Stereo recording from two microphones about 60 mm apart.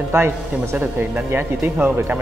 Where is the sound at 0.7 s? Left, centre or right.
Right.